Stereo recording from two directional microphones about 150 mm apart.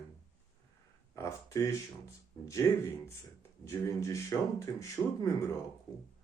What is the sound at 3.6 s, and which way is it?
Speech, 20° left (ahead or behind).